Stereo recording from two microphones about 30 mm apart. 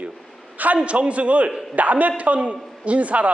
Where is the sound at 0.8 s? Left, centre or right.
Right.